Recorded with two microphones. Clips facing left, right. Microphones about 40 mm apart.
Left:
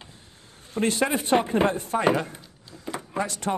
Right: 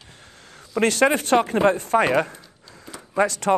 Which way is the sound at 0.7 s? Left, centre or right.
Right.